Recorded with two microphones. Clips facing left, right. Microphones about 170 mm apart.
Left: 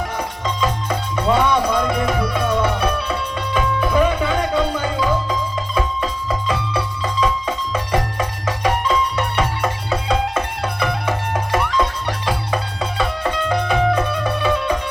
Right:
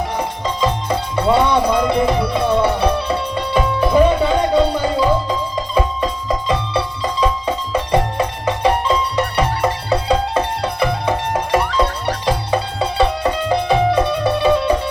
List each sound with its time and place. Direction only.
0.2 s music: 30° right (ahead or behind)